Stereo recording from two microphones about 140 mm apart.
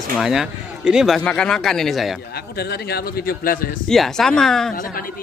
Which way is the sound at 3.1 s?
90° left.